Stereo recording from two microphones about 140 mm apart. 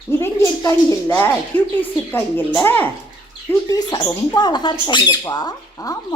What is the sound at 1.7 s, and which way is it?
A woman's voice, 15° left (ahead or behind).